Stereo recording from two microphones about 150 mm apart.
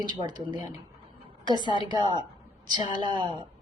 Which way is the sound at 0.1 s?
30° right (ahead or behind).